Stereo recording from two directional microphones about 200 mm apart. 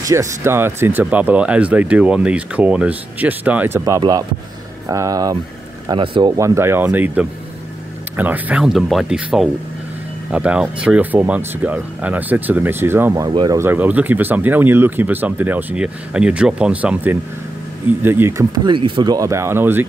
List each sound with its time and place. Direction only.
0.0 s speech: 15° right (ahead or behind)